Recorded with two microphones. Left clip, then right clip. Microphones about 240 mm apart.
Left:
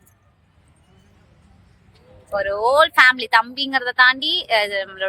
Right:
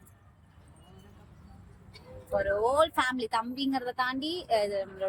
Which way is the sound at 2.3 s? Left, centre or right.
Left.